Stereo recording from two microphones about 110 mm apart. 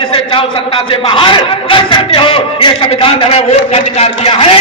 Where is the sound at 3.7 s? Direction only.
65° left (ahead or behind).